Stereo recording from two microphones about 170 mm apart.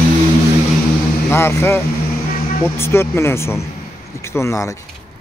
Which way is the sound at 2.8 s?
15° left (ahead or behind).